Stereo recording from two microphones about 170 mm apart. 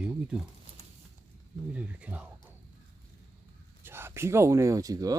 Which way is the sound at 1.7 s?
10° right (ahead or behind).